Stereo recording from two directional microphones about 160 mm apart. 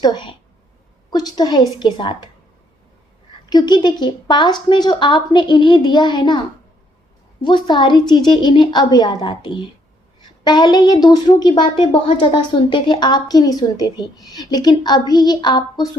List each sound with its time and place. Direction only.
0.0 s a woman's voice: 30° left (ahead or behind)
3.5 s a woman's voice: 25° left (ahead or behind)
7.4 s a woman's voice: 30° left (ahead or behind)